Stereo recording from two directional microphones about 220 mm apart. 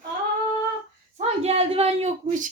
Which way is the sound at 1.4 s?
30° right (ahead or behind).